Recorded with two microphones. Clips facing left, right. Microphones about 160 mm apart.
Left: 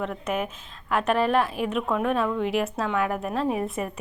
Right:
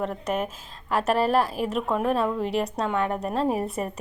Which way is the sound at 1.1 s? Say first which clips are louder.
Even; 35° right (ahead or behind).